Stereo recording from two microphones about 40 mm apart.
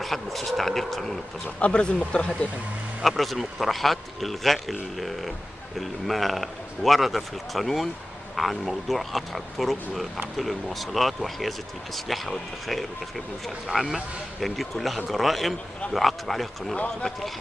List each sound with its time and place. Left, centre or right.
0.0 s speech: centre
1.6 s speech: left
3.0 s speech: centre